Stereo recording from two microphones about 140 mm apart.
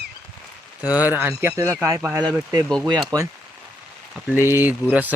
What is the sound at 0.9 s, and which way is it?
Speech, 10° right (ahead or behind).